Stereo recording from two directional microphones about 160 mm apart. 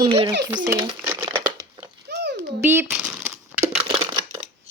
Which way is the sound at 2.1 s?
90° right.